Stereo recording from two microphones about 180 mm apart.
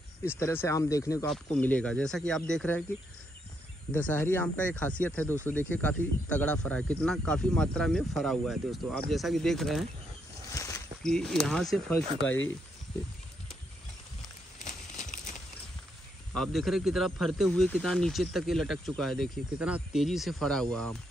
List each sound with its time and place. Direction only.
0.4 s speech: 15° left (ahead or behind)
1.2 s speech: 5° left (ahead or behind)
3.9 s speech: 10° left (ahead or behind)
10.5 s a sound: 15° left (ahead or behind)
11.0 s speech: 5° left (ahead or behind)
14.6 s a sound: 45° left (ahead or behind)
16.3 s speech: centre (ahead or behind)